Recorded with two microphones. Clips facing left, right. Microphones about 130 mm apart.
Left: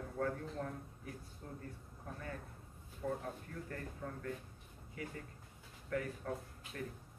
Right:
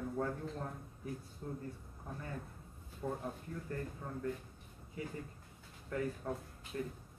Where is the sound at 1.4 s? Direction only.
20° right (ahead or behind).